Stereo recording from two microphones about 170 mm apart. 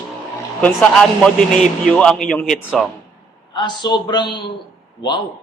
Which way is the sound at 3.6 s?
25° left (ahead or behind).